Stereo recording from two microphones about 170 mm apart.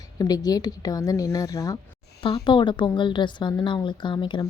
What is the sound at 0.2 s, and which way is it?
Speech, 20° left (ahead or behind).